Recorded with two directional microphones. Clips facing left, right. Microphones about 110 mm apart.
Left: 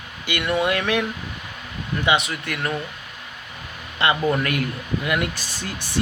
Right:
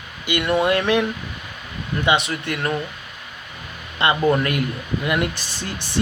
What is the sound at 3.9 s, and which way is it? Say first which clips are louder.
Speech: right 2 dB; 25° right (ahead or behind).